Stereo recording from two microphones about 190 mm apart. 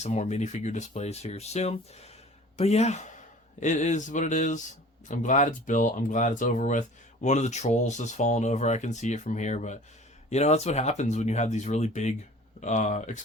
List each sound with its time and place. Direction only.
0.0 s a man's voice: 35° left (ahead or behind)